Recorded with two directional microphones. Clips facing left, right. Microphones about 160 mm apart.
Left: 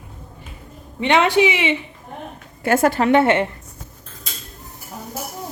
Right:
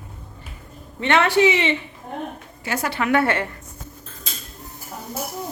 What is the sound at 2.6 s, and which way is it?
Speech, 50° left (ahead or behind).